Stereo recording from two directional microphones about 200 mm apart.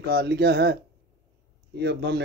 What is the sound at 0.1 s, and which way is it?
Speech, 55° right (ahead or behind).